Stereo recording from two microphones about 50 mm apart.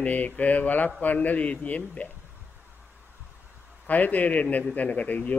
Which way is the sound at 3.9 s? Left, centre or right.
Left.